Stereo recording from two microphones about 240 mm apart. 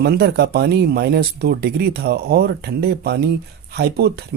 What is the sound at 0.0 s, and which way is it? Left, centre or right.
Speech, right.